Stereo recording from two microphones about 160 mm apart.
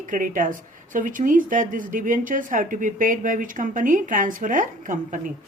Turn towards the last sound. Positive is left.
turn(degrees=-55)  # may be behind; listen again after turning